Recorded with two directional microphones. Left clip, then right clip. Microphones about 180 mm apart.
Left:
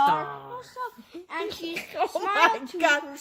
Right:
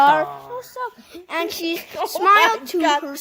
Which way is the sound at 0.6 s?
70° right (ahead or behind).